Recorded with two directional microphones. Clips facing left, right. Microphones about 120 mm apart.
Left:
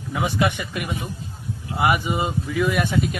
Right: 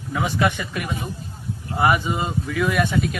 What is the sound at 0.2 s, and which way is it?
Speech, 20° left (ahead or behind).